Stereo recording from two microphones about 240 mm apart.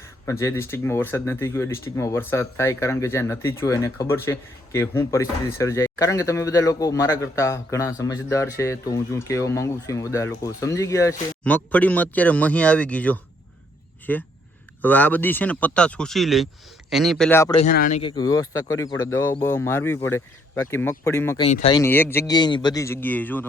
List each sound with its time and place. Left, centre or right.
0.3 s speech: centre
17.6 s a man's voice: left
18.0 s speech: centre
21.4 s speech: left
21.8 s speech: centre